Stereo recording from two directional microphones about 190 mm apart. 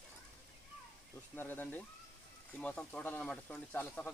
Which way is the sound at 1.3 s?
10° left (ahead or behind).